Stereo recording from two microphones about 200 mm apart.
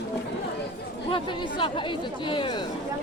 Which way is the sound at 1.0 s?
25° left (ahead or behind).